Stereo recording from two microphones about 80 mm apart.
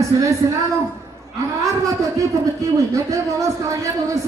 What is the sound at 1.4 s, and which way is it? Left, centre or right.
A man's voice, right.